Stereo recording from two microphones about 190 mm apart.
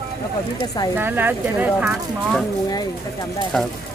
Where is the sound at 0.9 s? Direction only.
10° right (ahead or behind).